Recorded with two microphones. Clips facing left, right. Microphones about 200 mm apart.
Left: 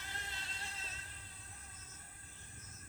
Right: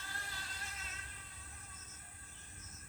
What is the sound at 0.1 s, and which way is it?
Music, 20° left (ahead or behind).